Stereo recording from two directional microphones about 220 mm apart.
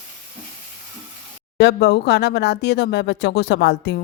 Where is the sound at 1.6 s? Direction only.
50° left (ahead or behind).